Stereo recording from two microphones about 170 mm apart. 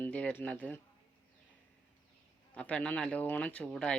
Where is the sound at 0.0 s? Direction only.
5° left (ahead or behind).